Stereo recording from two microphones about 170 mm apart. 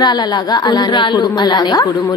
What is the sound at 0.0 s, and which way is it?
A woman's voice, 25° left (ahead or behind).